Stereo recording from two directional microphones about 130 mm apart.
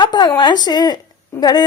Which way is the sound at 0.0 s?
35° left (ahead or behind).